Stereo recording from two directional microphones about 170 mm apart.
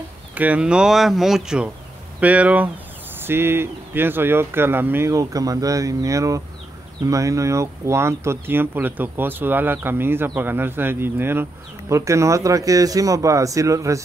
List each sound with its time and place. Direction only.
0.3 s speech: 10° right (ahead or behind)